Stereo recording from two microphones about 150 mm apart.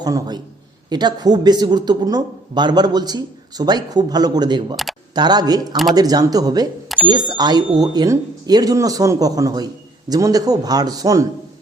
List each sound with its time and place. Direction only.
0.0 s speech: 25° right (ahead or behind)
6.8 s bicycle bell: centre (ahead or behind)
7.3 s speech: 25° right (ahead or behind)